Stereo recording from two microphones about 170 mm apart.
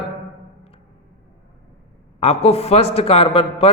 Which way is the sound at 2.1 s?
35° left (ahead or behind).